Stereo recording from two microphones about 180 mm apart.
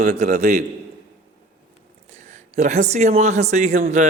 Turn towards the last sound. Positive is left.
turn(degrees=-40)  # may be behind; listen again after turning